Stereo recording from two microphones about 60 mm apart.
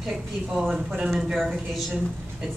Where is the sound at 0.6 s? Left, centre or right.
Centre.